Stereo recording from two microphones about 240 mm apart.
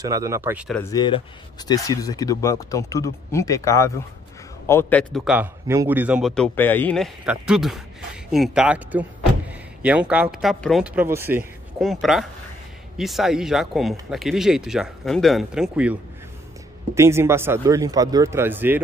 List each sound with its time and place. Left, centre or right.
0.0 s speech: centre
0.9 s speech: centre